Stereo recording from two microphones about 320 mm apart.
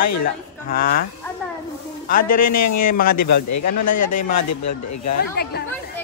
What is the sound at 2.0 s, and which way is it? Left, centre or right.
Speech, left.